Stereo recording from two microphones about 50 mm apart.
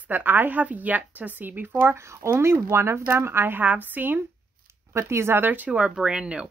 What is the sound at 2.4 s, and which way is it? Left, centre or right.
Speech, right.